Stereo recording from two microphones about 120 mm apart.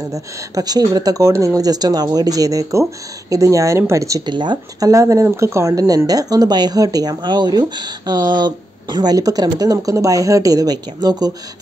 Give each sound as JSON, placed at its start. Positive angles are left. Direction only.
{"t": 0.1, "sound": "speech", "side_deg": -30}
{"t": 4.3, "sound": "speech", "side_deg": -40}